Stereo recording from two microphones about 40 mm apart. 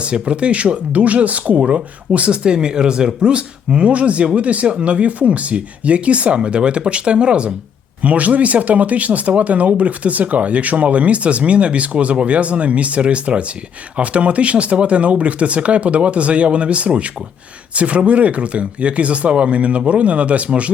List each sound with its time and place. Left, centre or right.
0.0 s speech: right